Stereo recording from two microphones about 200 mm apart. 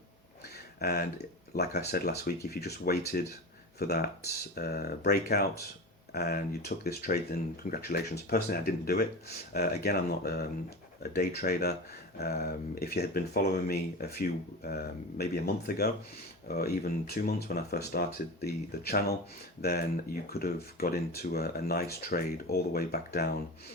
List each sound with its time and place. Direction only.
0.8 s speech: 50° left (ahead or behind)